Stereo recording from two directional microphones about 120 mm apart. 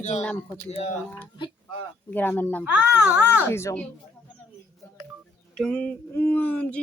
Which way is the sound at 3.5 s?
20° left (ahead or behind).